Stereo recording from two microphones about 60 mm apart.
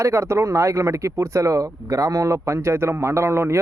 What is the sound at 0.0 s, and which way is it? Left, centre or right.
Speech, right.